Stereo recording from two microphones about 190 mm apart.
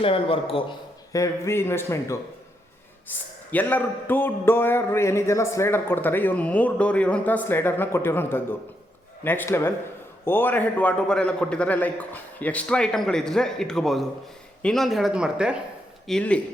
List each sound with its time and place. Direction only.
0.0 s a man's voice: 30° left (ahead or behind)
1.1 s a man's voice: 15° left (ahead or behind)